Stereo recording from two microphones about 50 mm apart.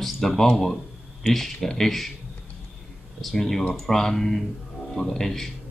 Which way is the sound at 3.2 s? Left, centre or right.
Centre.